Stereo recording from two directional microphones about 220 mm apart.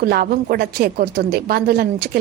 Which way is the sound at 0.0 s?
45° right (ahead or behind).